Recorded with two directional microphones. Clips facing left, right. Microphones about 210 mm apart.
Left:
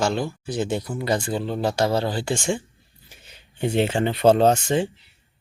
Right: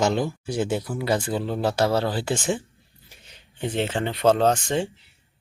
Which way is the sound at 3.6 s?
10° left (ahead or behind).